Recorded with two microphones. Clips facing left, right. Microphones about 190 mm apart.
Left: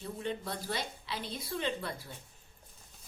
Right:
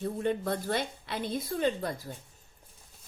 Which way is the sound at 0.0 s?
50° right (ahead or behind).